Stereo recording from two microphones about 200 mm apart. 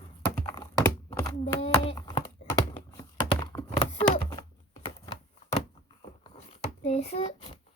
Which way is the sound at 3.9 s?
25° left (ahead or behind).